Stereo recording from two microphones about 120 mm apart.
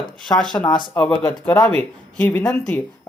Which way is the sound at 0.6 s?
40° left (ahead or behind).